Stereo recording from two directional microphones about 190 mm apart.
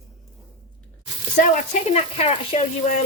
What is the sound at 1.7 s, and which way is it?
Speech, 35° left (ahead or behind).